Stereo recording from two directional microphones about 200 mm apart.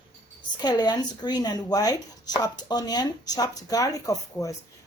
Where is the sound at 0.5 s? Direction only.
20° left (ahead or behind).